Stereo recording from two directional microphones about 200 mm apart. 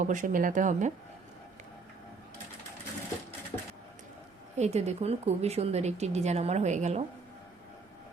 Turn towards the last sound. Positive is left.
turn(degrees=-35)  # may be behind; listen again after turning